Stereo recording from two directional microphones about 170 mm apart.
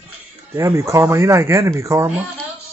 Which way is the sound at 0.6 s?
15° right (ahead or behind).